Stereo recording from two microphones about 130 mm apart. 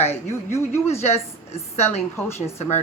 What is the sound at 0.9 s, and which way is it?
A woman's voice, 55° left (ahead or behind).